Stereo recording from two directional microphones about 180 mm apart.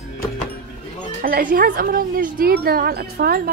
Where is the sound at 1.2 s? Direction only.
55° right (ahead or behind).